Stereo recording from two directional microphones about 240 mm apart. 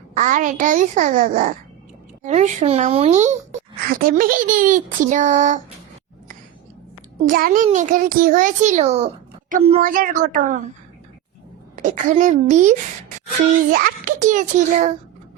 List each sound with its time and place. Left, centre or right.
0.2 s speech: right
7.3 s speech: right
11.8 s speech: right
13.7 s speech: right